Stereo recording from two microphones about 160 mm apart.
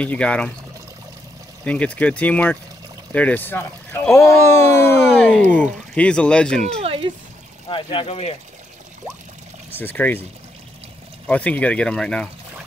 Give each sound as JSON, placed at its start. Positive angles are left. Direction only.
{"t": 0.0, "sound": "speech", "side_deg": 10}
{"t": 1.6, "sound": "speech", "side_deg": 5}
{"t": 5.0, "sound": "speech", "side_deg": 0}
{"t": 5.4, "sound": "speech", "side_deg": 10}
{"t": 6.8, "sound": "a sound", "side_deg": -35}
{"t": 7.6, "sound": "speech", "side_deg": 30}
{"t": 9.7, "sound": "speech", "side_deg": 10}
{"t": 11.2, "sound": "speech", "side_deg": 10}